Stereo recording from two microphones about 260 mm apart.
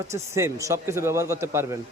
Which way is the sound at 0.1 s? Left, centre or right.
Centre.